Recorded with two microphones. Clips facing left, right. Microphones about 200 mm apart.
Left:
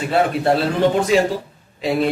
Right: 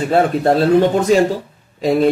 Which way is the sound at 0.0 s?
40° right (ahead or behind).